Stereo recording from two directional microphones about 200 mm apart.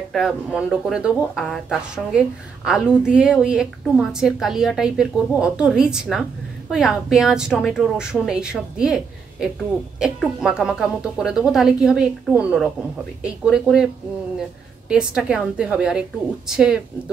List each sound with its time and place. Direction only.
0.1 s speech: centre (ahead or behind)
14.9 s speech: 5° right (ahead or behind)